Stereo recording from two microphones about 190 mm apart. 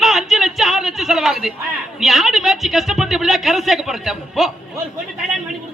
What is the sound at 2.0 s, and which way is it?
A woman's voice, centre (ahead or behind).